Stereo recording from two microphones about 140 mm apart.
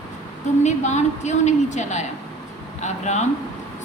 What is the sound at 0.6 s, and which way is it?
A woman's voice, 55° left (ahead or behind).